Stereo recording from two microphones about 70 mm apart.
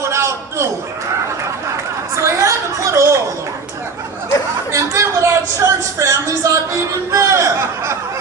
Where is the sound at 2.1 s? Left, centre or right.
Right.